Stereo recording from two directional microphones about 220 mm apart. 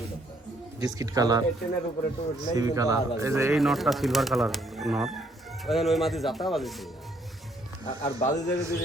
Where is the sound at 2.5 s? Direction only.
15° right (ahead or behind).